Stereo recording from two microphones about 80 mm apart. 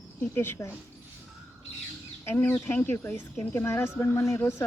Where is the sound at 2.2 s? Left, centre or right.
Left.